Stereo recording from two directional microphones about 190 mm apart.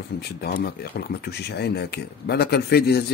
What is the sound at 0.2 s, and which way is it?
Speech, 55° left (ahead or behind).